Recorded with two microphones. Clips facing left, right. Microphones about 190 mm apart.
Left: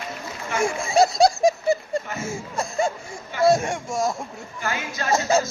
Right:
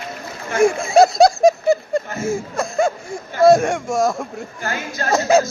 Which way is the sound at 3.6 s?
65° right (ahead or behind).